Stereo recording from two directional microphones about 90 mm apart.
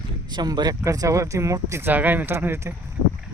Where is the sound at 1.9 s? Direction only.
20° right (ahead or behind).